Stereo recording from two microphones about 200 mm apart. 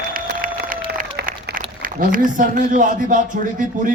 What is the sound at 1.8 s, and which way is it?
Speech, 45° right (ahead or behind).